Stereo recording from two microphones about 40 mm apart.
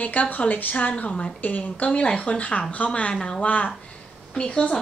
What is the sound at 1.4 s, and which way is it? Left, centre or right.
Speech, left.